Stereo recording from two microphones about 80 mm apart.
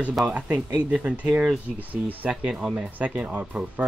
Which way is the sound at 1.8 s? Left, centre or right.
Right.